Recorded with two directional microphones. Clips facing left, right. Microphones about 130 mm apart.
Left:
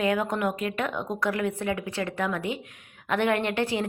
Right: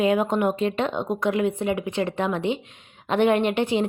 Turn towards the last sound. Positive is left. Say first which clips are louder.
# right 5 dB
turn(degrees=-20)  # may be behind; listen again after turning